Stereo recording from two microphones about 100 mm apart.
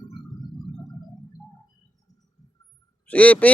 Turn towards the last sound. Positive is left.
turn(degrees=15)  # may be behind; listen again after turning